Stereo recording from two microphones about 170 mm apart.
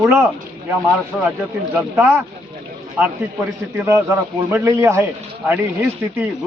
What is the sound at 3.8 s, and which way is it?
A man's voice, 15° right (ahead or behind).